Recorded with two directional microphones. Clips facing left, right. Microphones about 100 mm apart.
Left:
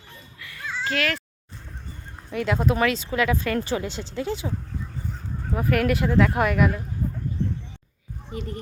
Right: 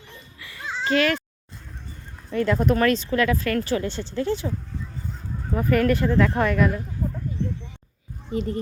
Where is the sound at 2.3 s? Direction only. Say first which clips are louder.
Right 3 dB; 10° left (ahead or behind).